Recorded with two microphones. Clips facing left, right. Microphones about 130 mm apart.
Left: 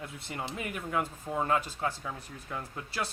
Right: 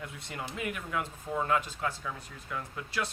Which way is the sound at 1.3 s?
25° left (ahead or behind).